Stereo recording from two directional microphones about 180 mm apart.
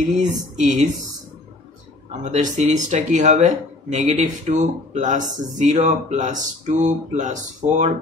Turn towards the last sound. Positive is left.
turn(degrees=-40)  # may be behind; listen again after turning